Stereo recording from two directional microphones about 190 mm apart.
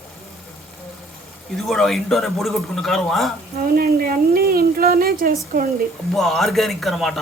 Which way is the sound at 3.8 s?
50° right (ahead or behind).